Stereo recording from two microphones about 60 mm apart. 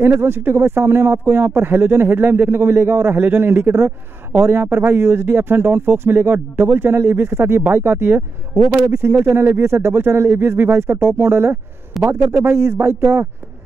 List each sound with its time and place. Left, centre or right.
0.0 s speech: right